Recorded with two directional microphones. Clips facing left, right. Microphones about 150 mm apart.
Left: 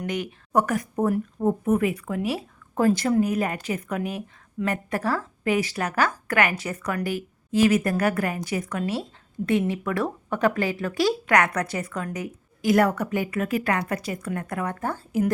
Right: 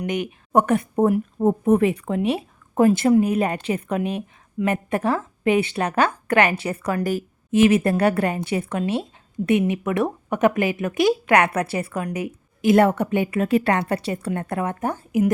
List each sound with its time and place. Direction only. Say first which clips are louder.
0.0 s a woman's voice: right 4 dB; 15° right (ahead or behind)
7.0 s a woman's voice: right 4 dB; 40° right (ahead or behind)
7.5 s a woman's voice: right 4 dB; 25° right (ahead or behind)